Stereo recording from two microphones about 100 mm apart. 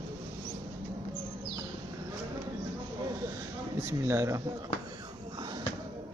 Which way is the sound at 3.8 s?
25° right (ahead or behind).